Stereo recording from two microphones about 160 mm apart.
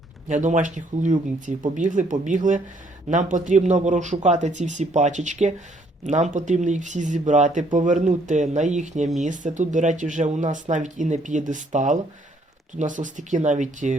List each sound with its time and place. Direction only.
0.3 s speech: 50° right (ahead or behind)